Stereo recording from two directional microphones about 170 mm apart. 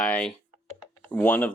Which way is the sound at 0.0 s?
5° left (ahead or behind).